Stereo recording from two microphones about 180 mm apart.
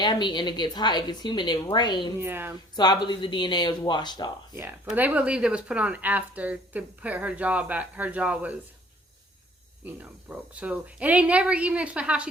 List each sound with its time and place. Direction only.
0.0 s a woman's voice: 25° left (ahead or behind)
2.1 s speech: 10° right (ahead or behind)
2.7 s a woman's voice: 25° left (ahead or behind)
4.9 s speech: 10° right (ahead or behind)
9.8 s speech: 10° right (ahead or behind)